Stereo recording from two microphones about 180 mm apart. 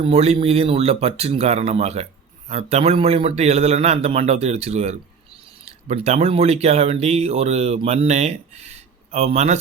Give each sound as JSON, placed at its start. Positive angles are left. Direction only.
{"t": 0.0, "sound": "speech", "side_deg": -35}